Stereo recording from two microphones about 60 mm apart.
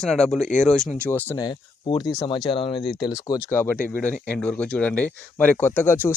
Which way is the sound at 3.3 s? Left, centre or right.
Left.